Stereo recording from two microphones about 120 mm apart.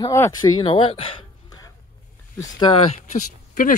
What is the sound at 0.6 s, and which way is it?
Speech, 45° left (ahead or behind).